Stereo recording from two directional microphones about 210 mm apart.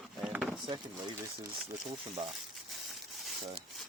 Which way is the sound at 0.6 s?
20° right (ahead or behind).